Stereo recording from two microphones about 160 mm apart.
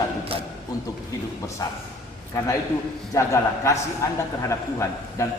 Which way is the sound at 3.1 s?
20° left (ahead or behind).